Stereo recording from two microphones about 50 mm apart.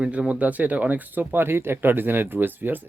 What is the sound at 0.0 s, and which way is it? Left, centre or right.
Speech, right.